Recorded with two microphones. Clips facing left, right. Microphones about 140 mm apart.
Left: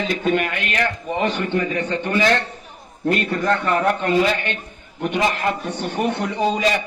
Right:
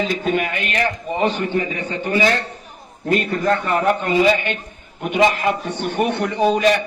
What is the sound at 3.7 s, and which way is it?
Speech, 55° left (ahead or behind).